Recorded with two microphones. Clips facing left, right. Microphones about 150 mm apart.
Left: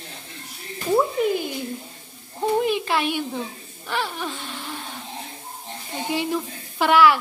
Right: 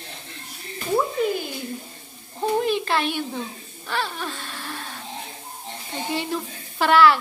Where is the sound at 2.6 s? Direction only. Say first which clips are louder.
Even; 10° left (ahead or behind).